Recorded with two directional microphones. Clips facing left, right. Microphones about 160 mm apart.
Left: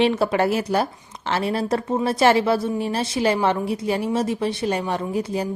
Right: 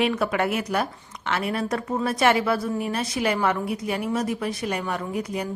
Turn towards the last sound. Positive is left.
turn(degrees=30)  # may be behind; listen again after turning